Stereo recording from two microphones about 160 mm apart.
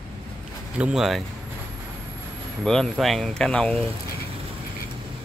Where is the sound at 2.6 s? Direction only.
5° left (ahead or behind).